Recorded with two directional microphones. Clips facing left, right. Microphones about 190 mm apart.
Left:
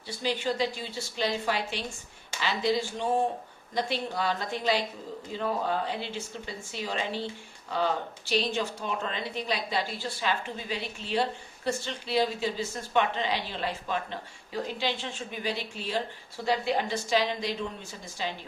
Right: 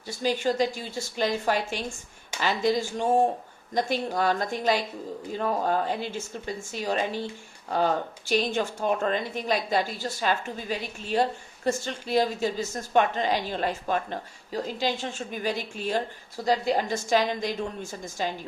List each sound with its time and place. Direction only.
0.1 s speech: 45° right (ahead or behind)